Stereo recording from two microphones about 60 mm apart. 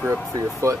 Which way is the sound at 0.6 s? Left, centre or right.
Right.